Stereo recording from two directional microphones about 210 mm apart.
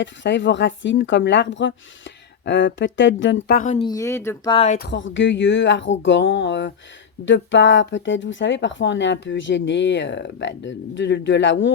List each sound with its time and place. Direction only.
0.0 s speech: 60° left (ahead or behind)
3.5 s speech: 40° left (ahead or behind)
3.8 s speech: 20° left (ahead or behind)
4.5 s speech: 30° left (ahead or behind)
4.8 s speech: 60° left (ahead or behind)